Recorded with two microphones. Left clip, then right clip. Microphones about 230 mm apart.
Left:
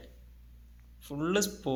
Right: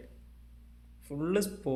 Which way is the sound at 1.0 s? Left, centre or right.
Centre.